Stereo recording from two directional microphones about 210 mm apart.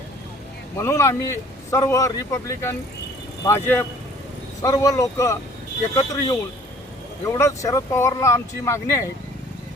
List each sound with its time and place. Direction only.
0.8 s a man's voice: 15° left (ahead or behind)